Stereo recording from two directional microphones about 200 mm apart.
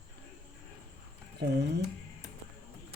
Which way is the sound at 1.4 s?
55° right (ahead or behind).